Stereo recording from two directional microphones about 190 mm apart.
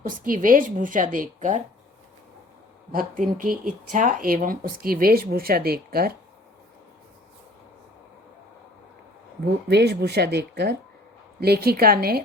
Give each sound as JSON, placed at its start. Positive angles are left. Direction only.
{"t": 0.3, "sound": "speech", "side_deg": -45}
{"t": 2.9, "sound": "speech", "side_deg": -45}
{"t": 9.6, "sound": "speech", "side_deg": -60}